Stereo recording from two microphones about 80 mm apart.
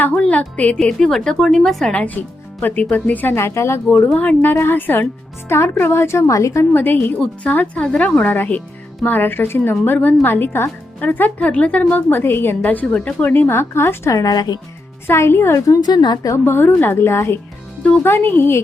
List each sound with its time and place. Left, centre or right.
0.2 s a woman's voice: centre
1.9 s speech: centre
3.3 s a woman's voice: left
4.1 s speech: centre
4.4 s a woman's voice: left
6.7 s speech: left
15.0 s a woman's voice: left
15.8 s a woman's voice: left
16.4 s a woman's voice: left